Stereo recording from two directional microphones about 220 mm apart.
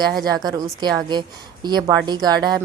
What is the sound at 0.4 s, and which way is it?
A woman's voice, 20° right (ahead or behind).